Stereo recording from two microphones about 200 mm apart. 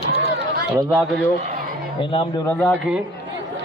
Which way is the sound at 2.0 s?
25° left (ahead or behind).